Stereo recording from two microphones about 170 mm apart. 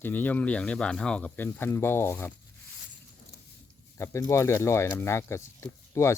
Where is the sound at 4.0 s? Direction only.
15° left (ahead or behind).